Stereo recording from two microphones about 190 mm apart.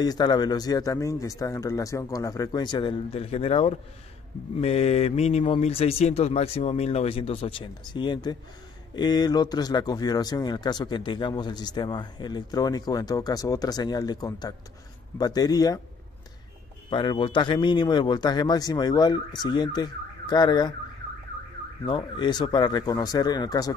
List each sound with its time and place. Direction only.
0.0 s speech: 20° left (ahead or behind)
16.9 s speech: 25° left (ahead or behind)
21.8 s speech: 25° left (ahead or behind)